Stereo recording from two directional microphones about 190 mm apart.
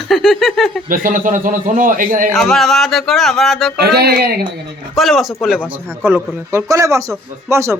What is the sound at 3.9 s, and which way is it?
Speech, 55° right (ahead or behind).